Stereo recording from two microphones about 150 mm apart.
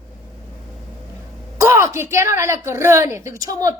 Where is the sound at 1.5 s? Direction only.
20° right (ahead or behind).